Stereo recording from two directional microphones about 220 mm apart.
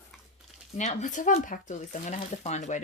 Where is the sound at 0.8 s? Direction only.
35° left (ahead or behind).